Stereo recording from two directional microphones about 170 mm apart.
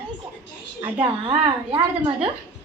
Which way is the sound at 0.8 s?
30° right (ahead or behind).